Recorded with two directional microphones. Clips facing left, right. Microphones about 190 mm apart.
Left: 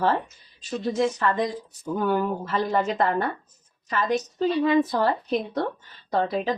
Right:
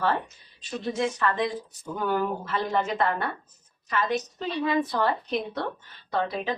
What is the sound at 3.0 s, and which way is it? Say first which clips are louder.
Speech: left 3 dB; 40° left (ahead or behind).